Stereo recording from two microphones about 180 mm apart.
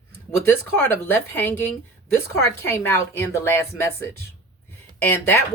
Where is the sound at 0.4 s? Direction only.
10° left (ahead or behind).